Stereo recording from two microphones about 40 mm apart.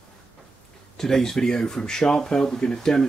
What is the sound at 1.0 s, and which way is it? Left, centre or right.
Speech, centre.